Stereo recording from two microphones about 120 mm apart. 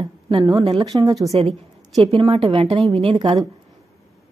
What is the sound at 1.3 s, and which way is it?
Speech, 60° right (ahead or behind).